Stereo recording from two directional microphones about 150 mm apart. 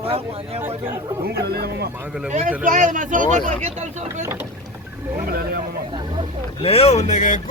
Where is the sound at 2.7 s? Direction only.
60° right (ahead or behind).